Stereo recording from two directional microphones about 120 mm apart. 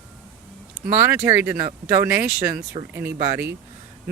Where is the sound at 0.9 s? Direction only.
20° right (ahead or behind).